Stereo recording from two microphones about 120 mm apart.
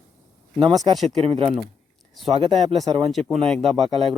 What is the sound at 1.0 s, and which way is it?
Speech, 55° right (ahead or behind).